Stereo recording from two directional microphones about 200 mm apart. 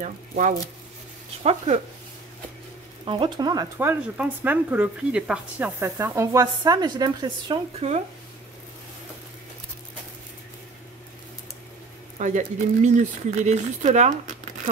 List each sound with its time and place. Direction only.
0.0 s speech: 40° right (ahead or behind)
3.1 s speech: 20° right (ahead or behind)
12.2 s speech: 40° right (ahead or behind)